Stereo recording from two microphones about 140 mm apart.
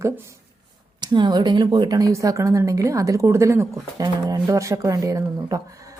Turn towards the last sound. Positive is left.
turn(degrees=-25)  # may be behind; listen again after turning